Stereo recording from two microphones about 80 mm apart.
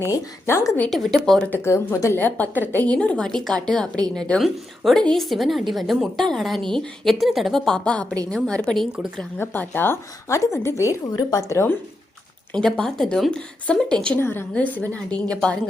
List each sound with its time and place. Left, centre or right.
0.4 s a woman's voice: left
0.9 s a woman's voice: centre
1.5 s a woman's voice: left
1.7 s a woman's voice: left
2.1 s a woman's voice: left; by 8.9 s centre
8.9 s a woman's voice: centre
9.4 s a woman's voice: left
11.1 s a woman's voice: left
12.5 s a woman's voice: centre
14.2 s a woman's voice: left